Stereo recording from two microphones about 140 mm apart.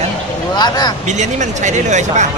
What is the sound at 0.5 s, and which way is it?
Vehicle, 30° left (ahead or behind).